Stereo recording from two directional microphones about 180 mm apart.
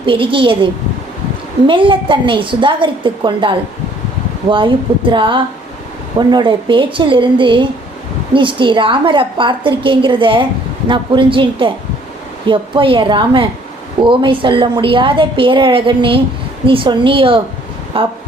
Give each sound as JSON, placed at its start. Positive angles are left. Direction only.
{"t": 0.0, "sound": "a woman's voice", "side_deg": -30}